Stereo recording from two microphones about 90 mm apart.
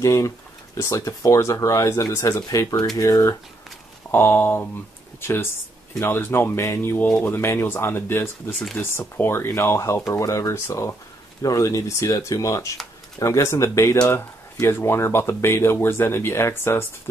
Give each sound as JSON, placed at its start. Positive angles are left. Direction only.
{"t": 0.0, "sound": "speech", "side_deg": 35}
{"t": 4.1, "sound": "speech", "side_deg": 25}